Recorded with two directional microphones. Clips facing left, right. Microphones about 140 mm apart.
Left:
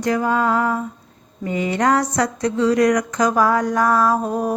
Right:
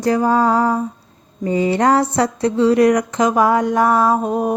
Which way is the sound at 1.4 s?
30° right (ahead or behind).